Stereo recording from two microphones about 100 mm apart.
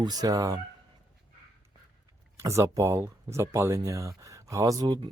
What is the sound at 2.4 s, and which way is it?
Speech, 30° right (ahead or behind).